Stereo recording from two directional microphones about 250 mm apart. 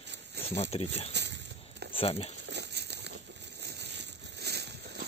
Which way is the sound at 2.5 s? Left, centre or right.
Right.